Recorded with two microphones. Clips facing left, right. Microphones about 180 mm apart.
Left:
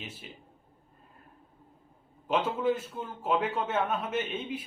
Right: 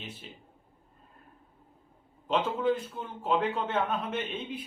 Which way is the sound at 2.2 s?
5° left (ahead or behind).